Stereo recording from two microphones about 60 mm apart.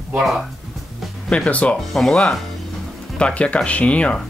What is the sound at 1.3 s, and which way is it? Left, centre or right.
Speech, left.